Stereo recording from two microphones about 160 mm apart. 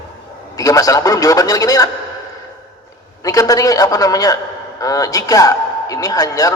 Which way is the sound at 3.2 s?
20° left (ahead or behind).